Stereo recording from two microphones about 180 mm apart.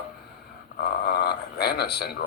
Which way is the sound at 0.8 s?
60° left (ahead or behind).